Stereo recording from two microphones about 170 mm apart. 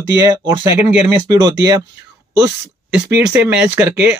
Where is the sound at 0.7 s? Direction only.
10° right (ahead or behind).